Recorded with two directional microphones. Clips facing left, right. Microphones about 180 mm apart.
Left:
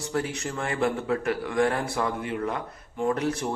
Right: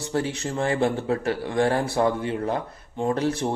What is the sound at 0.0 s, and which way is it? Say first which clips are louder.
Speech: right 3 dB; 30° right (ahead or behind).